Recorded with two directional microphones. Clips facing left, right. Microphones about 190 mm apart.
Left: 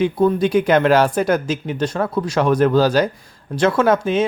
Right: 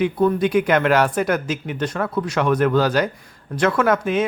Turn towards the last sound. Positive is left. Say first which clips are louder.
# left 2 dB
turn(degrees=30)  # may be behind; listen again after turning